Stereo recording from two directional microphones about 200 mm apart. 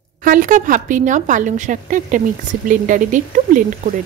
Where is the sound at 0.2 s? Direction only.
40° right (ahead or behind).